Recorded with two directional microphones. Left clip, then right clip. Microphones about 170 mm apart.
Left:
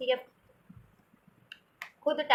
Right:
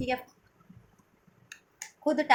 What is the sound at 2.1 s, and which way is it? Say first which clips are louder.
Speech: right 3 dB; 45° right (ahead or behind).